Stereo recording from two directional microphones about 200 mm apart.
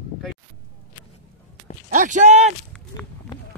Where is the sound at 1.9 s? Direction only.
40° right (ahead or behind).